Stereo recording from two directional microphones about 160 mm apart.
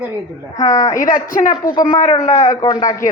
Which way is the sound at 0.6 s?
25° left (ahead or behind).